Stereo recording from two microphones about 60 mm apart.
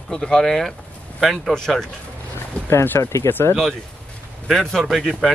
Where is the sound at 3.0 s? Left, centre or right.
Left.